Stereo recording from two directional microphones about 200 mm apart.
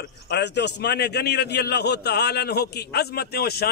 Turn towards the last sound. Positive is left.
turn(degrees=50)  # may be behind; listen again after turning